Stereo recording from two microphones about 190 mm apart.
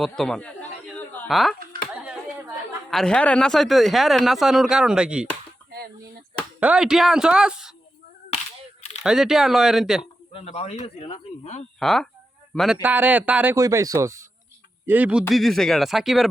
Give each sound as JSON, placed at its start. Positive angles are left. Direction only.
{"t": 0.0, "sound": "a sound", "side_deg": 0}
{"t": 1.3, "sound": "speech", "side_deg": 0}
{"t": 2.9, "sound": "speech", "side_deg": 5}
{"t": 6.6, "sound": "speech", "side_deg": -5}
{"t": 9.0, "sound": "speech", "side_deg": 0}
{"t": 10.3, "sound": "speech", "side_deg": 35}
{"t": 11.8, "sound": "a man's voice", "side_deg": 0}